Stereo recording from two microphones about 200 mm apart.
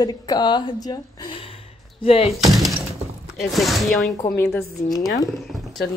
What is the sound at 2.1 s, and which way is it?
Speech, 30° left (ahead or behind).